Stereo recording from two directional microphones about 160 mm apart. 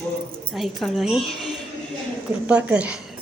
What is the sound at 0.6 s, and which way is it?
A woman's voice, centre (ahead or behind).